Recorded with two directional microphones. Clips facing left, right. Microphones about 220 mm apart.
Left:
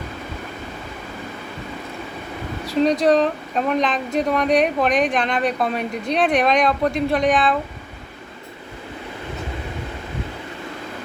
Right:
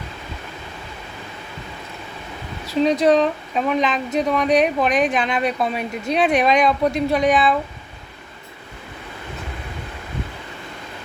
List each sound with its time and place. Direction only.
3.0 s speech: centre (ahead or behind)